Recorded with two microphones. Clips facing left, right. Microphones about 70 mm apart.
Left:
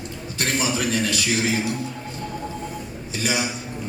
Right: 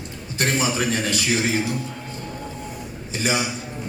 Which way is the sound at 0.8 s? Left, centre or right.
Right.